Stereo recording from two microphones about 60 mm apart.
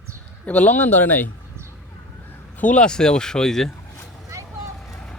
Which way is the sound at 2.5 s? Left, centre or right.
Left.